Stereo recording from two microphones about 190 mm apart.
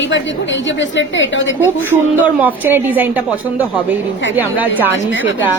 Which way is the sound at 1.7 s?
10° right (ahead or behind).